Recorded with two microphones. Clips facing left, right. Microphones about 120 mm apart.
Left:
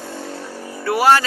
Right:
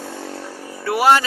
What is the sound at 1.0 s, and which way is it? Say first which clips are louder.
Speech: even; 20° right (ahead or behind).